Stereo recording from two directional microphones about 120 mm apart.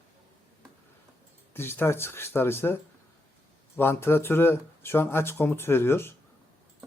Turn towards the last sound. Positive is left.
turn(degrees=20)  # may be behind; listen again after turning